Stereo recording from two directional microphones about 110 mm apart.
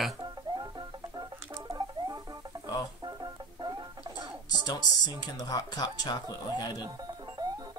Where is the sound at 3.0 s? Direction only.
40° right (ahead or behind).